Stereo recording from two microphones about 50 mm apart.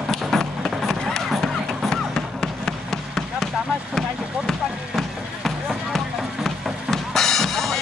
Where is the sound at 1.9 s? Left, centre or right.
Centre.